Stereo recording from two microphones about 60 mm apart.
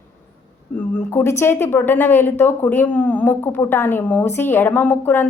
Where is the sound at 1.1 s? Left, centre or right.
Left.